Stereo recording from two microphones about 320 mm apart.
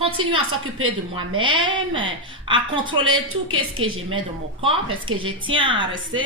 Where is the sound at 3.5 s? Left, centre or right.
Right.